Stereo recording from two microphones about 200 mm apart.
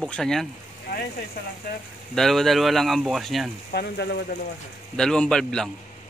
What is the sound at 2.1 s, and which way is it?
Speech, centre (ahead or behind).